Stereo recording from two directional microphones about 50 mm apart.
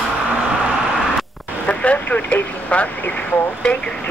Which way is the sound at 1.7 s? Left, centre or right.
Left.